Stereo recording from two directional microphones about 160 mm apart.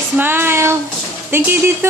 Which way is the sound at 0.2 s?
15° right (ahead or behind).